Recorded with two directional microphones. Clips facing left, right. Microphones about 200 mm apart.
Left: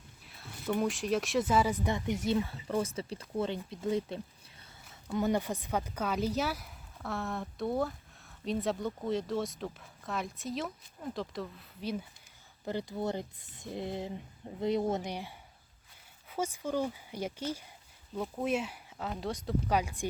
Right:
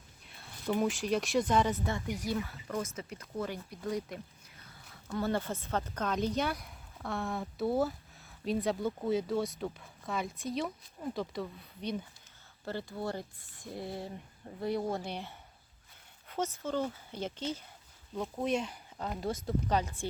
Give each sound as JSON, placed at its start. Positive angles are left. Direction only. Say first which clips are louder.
{"t": 0.3, "sound": "speech", "louder": "even", "side_deg": 0}
{"t": 12.6, "sound": "speech", "louder": "left 3 dB", "side_deg": 20}
{"t": 16.3, "sound": "speech", "louder": "left 1 dB", "side_deg": 10}
{"t": 19.6, "sound": "speech", "louder": "left 1 dB", "side_deg": 10}